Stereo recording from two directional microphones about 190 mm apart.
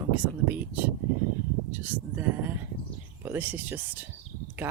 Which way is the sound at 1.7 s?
10° right (ahead or behind).